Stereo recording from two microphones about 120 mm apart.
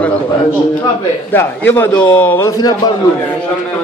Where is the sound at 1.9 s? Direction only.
35° left (ahead or behind).